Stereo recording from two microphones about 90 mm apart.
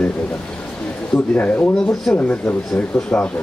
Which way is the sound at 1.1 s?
15° left (ahead or behind).